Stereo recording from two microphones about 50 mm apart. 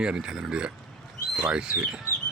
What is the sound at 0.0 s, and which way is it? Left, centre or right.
Speech, centre.